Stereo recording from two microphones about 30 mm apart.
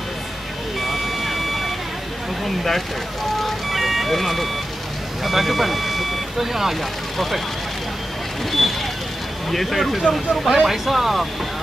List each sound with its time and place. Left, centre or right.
0.7 s a sound: centre
2.4 s speech: centre
8.5 s vehicle: centre
9.5 s speech: centre
10.5 s speech: centre